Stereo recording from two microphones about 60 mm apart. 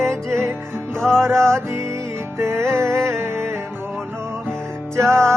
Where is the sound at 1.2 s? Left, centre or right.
Right.